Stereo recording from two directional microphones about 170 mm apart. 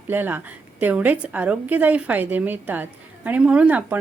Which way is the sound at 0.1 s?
10° right (ahead or behind).